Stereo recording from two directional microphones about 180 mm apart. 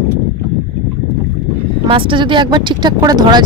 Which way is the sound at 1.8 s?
30° right (ahead or behind).